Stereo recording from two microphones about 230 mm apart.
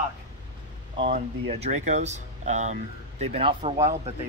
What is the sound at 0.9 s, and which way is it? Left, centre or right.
Speech, right.